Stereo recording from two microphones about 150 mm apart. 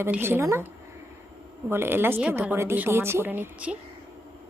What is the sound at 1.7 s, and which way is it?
A woman's voice, 15° right (ahead or behind).